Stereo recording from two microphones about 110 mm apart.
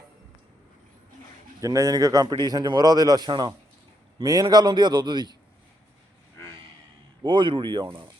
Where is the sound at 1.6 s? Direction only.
30° right (ahead or behind).